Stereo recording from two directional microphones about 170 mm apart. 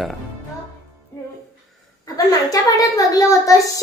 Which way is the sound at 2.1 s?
20° left (ahead or behind).